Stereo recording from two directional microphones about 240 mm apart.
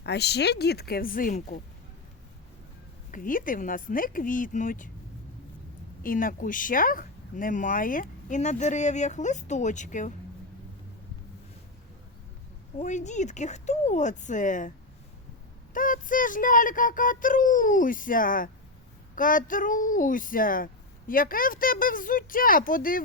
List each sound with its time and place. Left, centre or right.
0.0 s speech: left
3.1 s speech: left
6.0 s speech: left
12.8 s speech: left
15.7 s speech: left